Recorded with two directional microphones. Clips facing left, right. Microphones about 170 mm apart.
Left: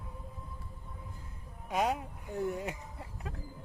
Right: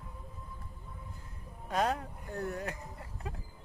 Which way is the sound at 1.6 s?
15° left (ahead or behind).